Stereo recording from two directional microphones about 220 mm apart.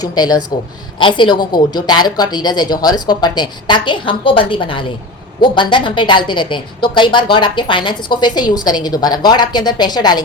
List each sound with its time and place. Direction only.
0.0 s a woman's voice: 20° left (ahead or behind)